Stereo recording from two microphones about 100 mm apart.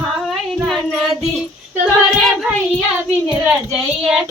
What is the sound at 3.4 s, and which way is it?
Speech, 10° right (ahead or behind).